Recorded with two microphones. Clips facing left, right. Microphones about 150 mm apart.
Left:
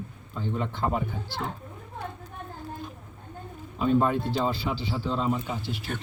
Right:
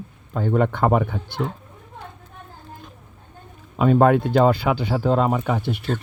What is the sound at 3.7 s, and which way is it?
Speech, 85° right.